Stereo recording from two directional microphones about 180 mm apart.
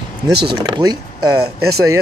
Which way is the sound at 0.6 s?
25° right (ahead or behind).